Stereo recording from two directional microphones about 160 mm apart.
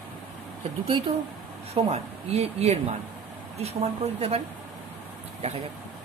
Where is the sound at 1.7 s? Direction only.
40° right (ahead or behind).